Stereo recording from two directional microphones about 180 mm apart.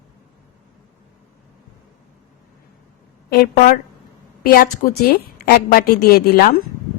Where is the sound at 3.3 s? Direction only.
55° left (ahead or behind).